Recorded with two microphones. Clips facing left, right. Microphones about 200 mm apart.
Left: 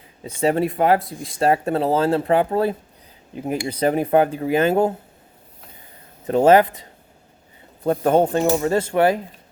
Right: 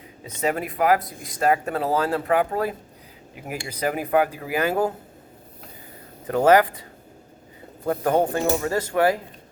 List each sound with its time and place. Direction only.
0.3 s speech: 30° left (ahead or behind)
6.2 s speech: 25° left (ahead or behind)
7.9 s speech: 25° left (ahead or behind)